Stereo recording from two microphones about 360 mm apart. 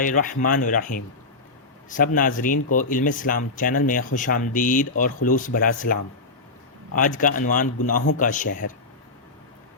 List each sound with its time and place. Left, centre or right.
0.0 s speech: left